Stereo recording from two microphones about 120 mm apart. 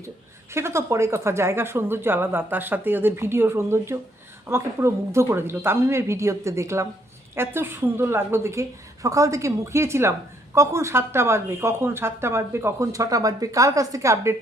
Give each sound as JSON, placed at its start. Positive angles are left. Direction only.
{"t": 0.5, "sound": "a woman's voice", "side_deg": -20}